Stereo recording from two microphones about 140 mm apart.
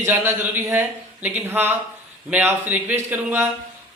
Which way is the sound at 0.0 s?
15° right (ahead or behind).